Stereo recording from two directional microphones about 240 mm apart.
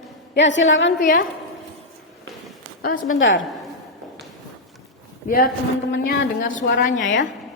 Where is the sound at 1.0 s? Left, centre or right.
Left.